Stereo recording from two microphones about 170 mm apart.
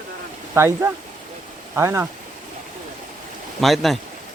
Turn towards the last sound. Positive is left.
turn(degrees=0)  # may be behind; listen again after turning